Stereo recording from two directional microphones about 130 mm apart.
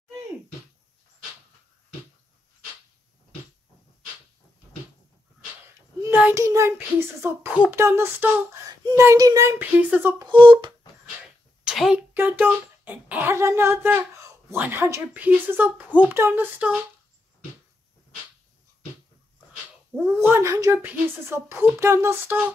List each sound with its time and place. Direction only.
6.0 s child singing: 15° right (ahead or behind)
6.4 s a woman's voice: 25° right (ahead or behind)
10.1 s speech: 40° right (ahead or behind)
11.6 s a sound: 5° right (ahead or behind)
12.1 s a child's voice: 15° right (ahead or behind)
20.1 s a woman's voice: 20° right (ahead or behind)